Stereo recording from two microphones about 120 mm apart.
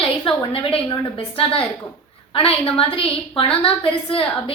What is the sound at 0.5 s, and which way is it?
A woman's voice, 50° left (ahead or behind).